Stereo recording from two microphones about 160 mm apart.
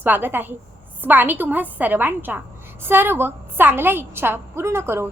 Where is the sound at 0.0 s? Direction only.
10° right (ahead or behind).